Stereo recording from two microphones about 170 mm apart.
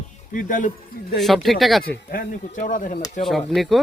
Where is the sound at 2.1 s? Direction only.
55° left (ahead or behind).